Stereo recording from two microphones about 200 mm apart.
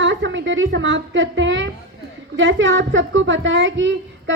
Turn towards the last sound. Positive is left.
turn(degrees=-70)  # may be behind; listen again after turning